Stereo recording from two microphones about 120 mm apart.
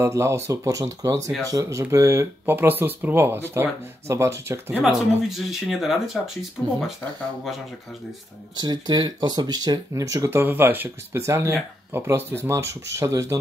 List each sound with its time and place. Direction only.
0.0 s speech: 20° right (ahead or behind)
4.9 s speech: centre (ahead or behind)
8.5 s speech: 35° right (ahead or behind)